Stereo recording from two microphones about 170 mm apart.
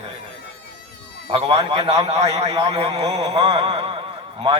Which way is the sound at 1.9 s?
40° right (ahead or behind).